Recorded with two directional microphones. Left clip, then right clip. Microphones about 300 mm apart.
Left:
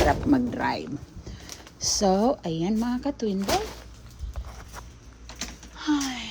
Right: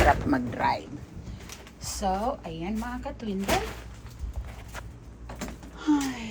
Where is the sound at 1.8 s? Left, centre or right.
Left.